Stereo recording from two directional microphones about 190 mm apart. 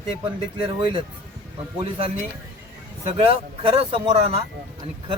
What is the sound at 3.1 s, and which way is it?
Speech, 30° right (ahead or behind).